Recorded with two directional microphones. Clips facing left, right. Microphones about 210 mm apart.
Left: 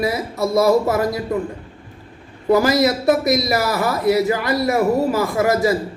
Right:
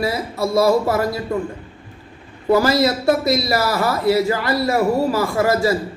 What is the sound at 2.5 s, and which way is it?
A man's voice, 20° left (ahead or behind).